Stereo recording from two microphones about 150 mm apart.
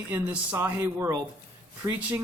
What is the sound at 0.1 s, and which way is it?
A man's voice, 15° right (ahead or behind).